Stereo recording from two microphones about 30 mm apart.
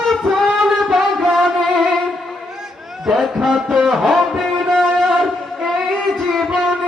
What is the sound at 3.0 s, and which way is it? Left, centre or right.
Music, centre.